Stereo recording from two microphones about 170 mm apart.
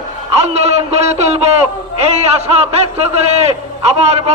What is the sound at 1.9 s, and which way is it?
A man's voice, 40° right (ahead or behind).